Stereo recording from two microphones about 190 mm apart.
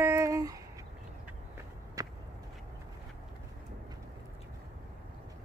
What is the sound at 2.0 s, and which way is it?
Whip, 15° right (ahead or behind).